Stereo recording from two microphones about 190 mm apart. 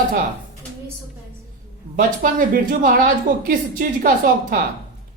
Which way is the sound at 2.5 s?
45° right (ahead or behind).